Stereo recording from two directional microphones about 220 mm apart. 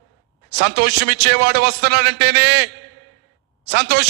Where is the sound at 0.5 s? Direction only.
50° right (ahead or behind).